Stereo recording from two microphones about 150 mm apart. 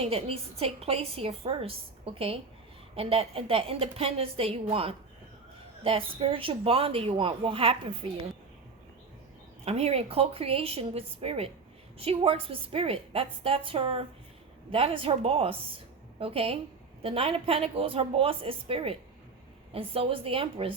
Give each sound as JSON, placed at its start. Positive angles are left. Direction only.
{"t": 0.0, "sound": "a woman's voice", "side_deg": -40}
{"t": 9.6, "sound": "a woman's voice", "side_deg": -45}